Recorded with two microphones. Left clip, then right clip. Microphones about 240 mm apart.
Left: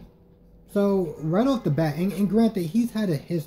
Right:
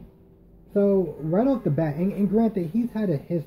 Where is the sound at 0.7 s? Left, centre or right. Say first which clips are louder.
Right 2 dB; left.